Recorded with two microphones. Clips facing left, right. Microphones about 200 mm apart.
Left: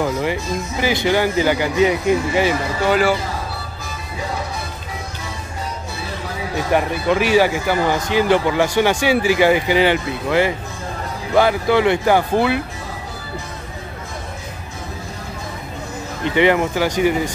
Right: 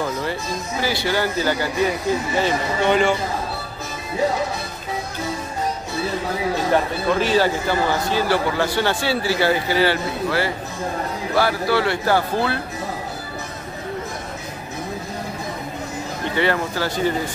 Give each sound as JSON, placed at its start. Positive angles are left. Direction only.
{"t": 0.0, "sound": "speech", "side_deg": 15}
{"t": 2.9, "sound": "a man's voice", "side_deg": 5}
{"t": 6.7, "sound": "speech", "side_deg": 15}
{"t": 16.3, "sound": "speech", "side_deg": 15}